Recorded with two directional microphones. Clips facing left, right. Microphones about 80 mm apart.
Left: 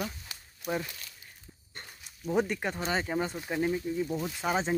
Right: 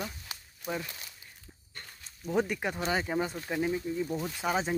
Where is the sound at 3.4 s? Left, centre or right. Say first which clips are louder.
Left 1 dB; centre.